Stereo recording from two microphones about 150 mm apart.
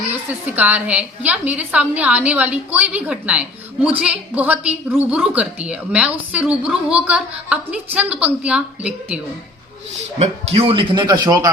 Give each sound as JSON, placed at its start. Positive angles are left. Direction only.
{"t": 0.3, "sound": "a woman's voice", "side_deg": -10}
{"t": 10.2, "sound": "speech", "side_deg": -40}